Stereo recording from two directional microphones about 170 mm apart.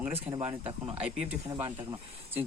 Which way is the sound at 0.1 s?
35° right (ahead or behind).